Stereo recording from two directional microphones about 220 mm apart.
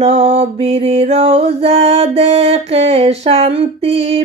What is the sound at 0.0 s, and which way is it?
Mantra, 25° right (ahead or behind).